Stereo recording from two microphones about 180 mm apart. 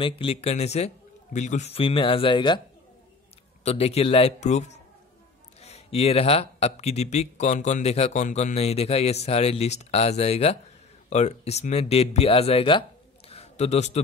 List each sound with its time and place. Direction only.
0.0 s speech: 30° left (ahead or behind)
3.6 s speech: 35° left (ahead or behind)
13.3 s a sound: 35° left (ahead or behind)